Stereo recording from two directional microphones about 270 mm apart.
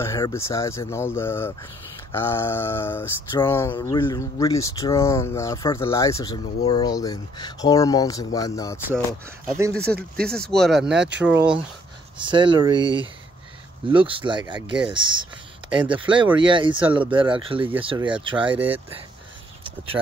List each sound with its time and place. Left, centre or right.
0.0 s speech: centre
9.8 s speech: right
10.2 s speech: centre
11.0 s speech: right
12.2 s speech: centre